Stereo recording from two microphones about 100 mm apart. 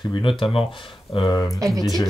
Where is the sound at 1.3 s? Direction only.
35° left (ahead or behind).